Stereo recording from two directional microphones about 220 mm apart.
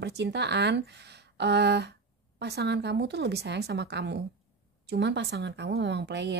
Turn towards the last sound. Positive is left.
turn(degrees=-50)  # may be behind; listen again after turning